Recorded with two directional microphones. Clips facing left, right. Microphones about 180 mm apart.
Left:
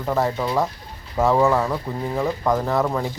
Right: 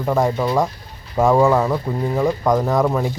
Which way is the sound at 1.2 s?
15° right (ahead or behind).